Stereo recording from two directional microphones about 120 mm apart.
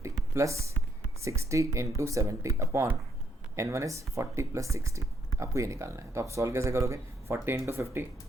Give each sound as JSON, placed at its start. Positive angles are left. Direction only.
{"t": 0.3, "sound": "speech", "side_deg": -25}